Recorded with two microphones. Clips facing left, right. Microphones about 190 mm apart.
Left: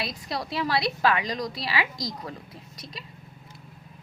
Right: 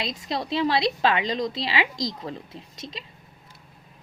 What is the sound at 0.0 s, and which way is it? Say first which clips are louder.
A woman's voice: right 3 dB; 20° right (ahead or behind).